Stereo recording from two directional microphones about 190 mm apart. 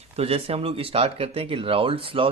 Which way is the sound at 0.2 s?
30° right (ahead or behind).